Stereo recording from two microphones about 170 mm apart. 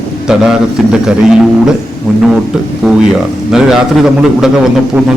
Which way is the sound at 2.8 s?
Centre (ahead or behind).